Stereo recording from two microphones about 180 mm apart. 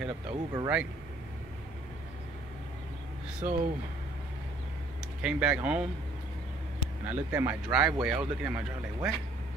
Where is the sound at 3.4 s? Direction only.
50° right (ahead or behind).